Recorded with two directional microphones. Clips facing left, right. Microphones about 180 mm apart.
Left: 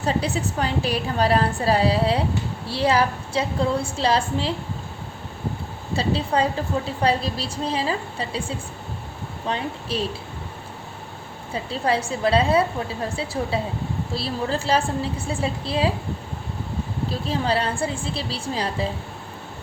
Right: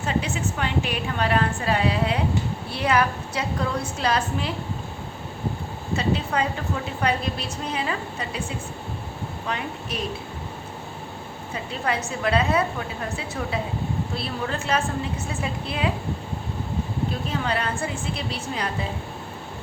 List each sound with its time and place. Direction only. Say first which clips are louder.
0.0 s a woman's voice: left 2 dB; 35° left (ahead or behind)
5.9 s a woman's voice: left 2 dB; 30° left (ahead or behind)
11.5 s a woman's voice: left 4 dB; 30° left (ahead or behind)
17.1 s a woman's voice: left 7 dB; 30° left (ahead or behind)